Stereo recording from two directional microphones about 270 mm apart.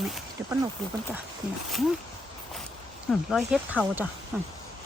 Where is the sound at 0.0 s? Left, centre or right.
Centre.